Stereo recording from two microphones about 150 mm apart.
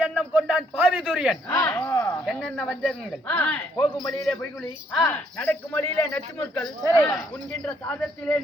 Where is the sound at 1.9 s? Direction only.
20° left (ahead or behind).